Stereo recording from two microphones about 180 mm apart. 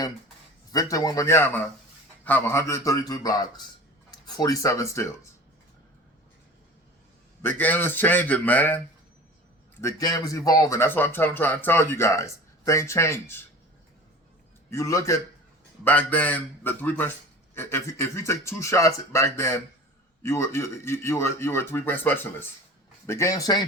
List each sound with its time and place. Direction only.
0.7 s speech: 20° left (ahead or behind)
7.4 s speech: 10° left (ahead or behind)
9.8 s speech: 20° left (ahead or behind)
14.7 s speech: 15° left (ahead or behind)